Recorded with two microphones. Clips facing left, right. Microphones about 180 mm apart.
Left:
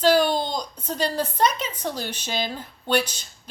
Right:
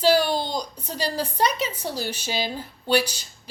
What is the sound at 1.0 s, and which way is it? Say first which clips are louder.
A woman's voice: left 1 dB; 10° right (ahead or behind).